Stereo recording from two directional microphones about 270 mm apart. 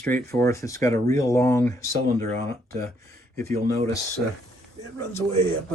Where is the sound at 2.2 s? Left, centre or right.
Right.